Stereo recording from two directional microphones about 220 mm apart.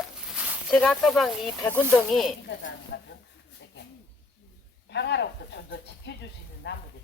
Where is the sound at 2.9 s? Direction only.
60° left (ahead or behind).